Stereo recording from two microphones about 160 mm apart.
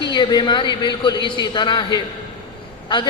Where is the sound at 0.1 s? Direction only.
25° left (ahead or behind).